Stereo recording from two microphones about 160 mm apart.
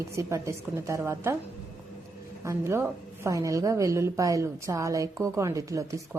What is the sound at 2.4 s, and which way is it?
A woman's voice, 15° right (ahead or behind).